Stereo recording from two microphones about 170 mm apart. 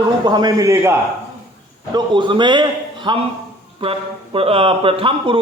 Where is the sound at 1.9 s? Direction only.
30° right (ahead or behind).